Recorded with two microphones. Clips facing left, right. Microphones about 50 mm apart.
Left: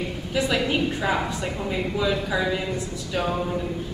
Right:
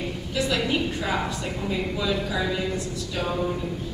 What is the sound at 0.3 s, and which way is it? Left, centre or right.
A woman's voice, centre.